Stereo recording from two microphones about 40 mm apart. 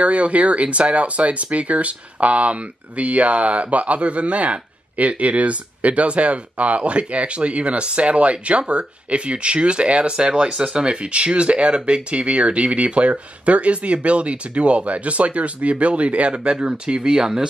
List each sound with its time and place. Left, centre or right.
0.0 s speech: right; by 17.5 s centre